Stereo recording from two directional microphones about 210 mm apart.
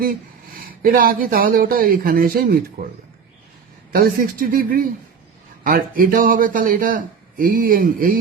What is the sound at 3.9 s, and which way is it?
Speech, 45° right (ahead or behind).